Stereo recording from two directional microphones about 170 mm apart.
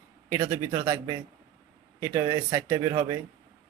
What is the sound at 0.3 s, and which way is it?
Speech, 15° right (ahead or behind).